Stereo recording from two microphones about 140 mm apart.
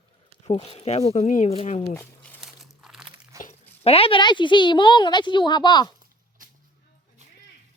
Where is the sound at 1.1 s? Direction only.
60° left (ahead or behind).